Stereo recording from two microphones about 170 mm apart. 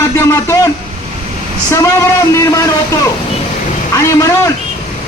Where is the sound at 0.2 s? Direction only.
15° left (ahead or behind).